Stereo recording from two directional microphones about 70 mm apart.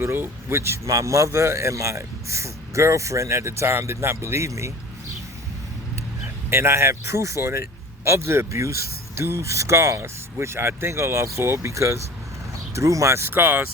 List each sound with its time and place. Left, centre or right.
0.0 s a man's voice: right
6.5 s speech: right